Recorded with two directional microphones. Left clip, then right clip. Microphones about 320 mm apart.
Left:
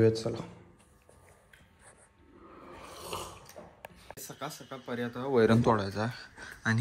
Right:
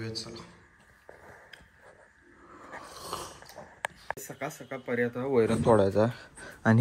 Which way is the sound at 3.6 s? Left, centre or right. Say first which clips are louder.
Right 4 dB; right.